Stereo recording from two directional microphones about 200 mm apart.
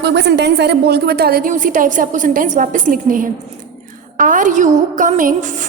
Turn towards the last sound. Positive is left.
turn(degrees=-40)  # may be behind; listen again after turning